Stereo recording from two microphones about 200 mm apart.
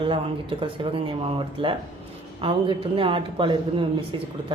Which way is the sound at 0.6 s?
25° right (ahead or behind).